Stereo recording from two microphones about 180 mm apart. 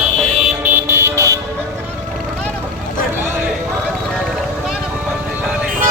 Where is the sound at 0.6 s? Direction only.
15° right (ahead or behind).